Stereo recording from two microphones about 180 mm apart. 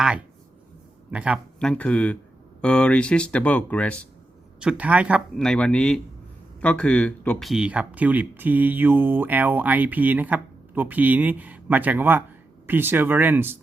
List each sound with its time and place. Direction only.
1.1 s speech: 5° right (ahead or behind)
1.5 s speech: 5° left (ahead or behind)
4.6 s speech: 5° right (ahead or behind)
5.4 s speech: 5° left (ahead or behind); by 13.6 s 10° right (ahead or behind)